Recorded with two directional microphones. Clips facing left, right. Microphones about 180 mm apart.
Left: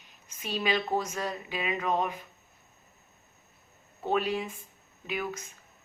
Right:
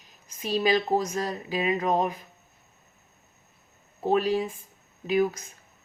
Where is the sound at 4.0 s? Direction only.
35° right (ahead or behind).